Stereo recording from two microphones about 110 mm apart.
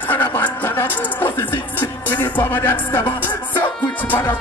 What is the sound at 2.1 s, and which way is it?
Music, 15° left (ahead or behind).